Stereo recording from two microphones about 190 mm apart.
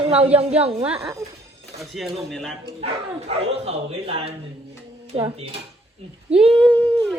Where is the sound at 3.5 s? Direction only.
30° right (ahead or behind).